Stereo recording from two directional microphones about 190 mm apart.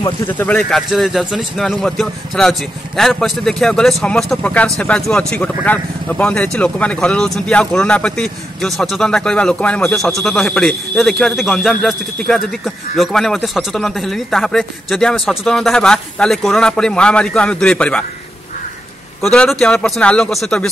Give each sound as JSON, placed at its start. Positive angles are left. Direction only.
{"t": 0.3, "sound": "a man's voice", "side_deg": 10}
{"t": 19.2, "sound": "a man's voice", "side_deg": 5}